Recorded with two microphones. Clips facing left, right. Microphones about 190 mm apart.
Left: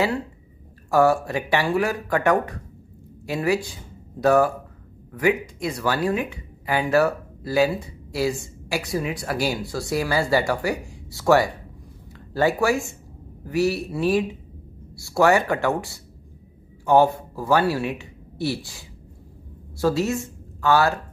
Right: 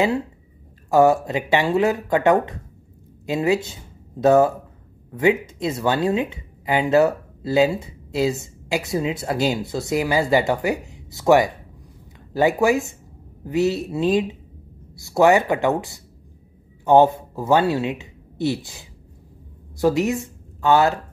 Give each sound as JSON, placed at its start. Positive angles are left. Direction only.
{"t": 0.8, "sound": "a woman's voice", "side_deg": -20}